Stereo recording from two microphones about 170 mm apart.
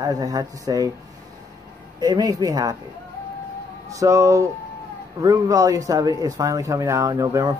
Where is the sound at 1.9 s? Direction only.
25° right (ahead or behind).